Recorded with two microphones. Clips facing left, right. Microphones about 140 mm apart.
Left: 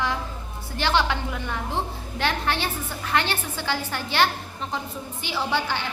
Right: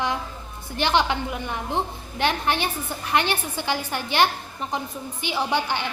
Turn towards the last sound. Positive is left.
turn(degrees=-15)  # may be behind; listen again after turning